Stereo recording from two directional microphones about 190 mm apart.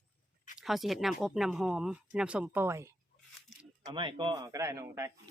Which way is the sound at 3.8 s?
25° right (ahead or behind).